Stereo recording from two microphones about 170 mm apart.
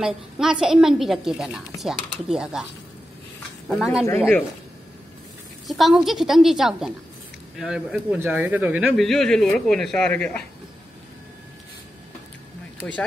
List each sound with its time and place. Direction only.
0.0 s a woman's voice: 5° right (ahead or behind)
3.6 s a woman's voice: centre (ahead or behind)
5.7 s a woman's voice: centre (ahead or behind)
9.0 s a woman's voice: centre (ahead or behind)